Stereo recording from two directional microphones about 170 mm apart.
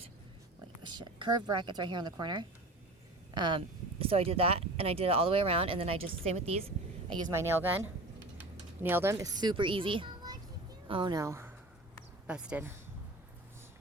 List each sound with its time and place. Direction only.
0.8 s a woman's voice: 25° right (ahead or behind)
7.3 s a woman's voice: 15° right (ahead or behind)